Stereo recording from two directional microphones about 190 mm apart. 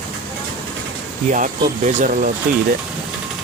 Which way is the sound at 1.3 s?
40° right (ahead or behind).